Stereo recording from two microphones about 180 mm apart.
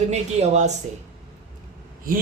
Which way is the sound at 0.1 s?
40° right (ahead or behind).